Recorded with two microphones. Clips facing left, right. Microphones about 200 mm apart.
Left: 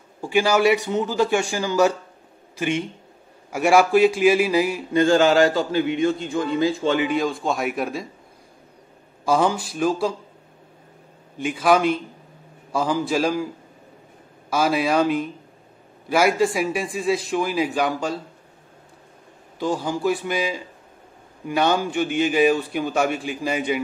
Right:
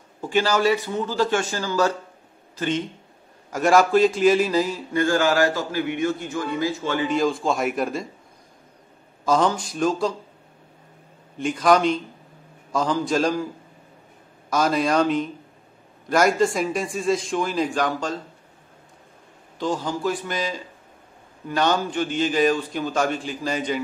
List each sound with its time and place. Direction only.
0.2 s a man's voice: 10° left (ahead or behind)
4.9 s a man's voice: 25° left (ahead or behind)
7.1 s a man's voice: centre (ahead or behind)
9.2 s a man's voice: 10° left (ahead or behind)
11.3 s a man's voice: 5° left (ahead or behind)
14.5 s a man's voice: 5° left (ahead or behind)
19.6 s a man's voice: 10° left (ahead or behind)